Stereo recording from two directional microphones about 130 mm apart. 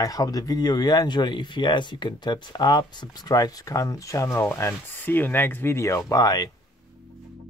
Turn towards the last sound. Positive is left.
turn(degrees=30)  # may be behind; listen again after turning